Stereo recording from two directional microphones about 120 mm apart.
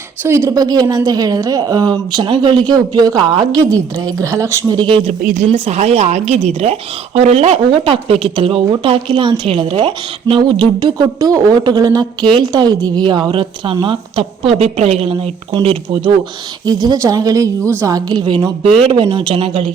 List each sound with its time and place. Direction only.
0.2 s speech: 20° right (ahead or behind)
4.9 s a woman's voice: 45° right (ahead or behind)
5.5 s a woman's voice: 55° right (ahead or behind)
16.6 s a woman's voice: 35° right (ahead or behind)